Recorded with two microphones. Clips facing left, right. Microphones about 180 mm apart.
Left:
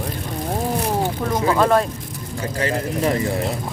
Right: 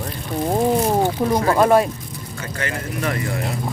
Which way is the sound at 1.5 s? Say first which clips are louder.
Right 2 dB; 10° right (ahead or behind).